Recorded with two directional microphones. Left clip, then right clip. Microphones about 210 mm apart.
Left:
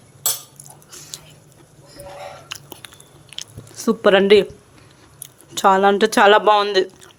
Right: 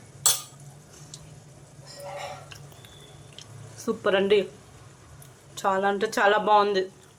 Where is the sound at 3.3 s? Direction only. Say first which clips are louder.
Left 15 dB; 50° left (ahead or behind).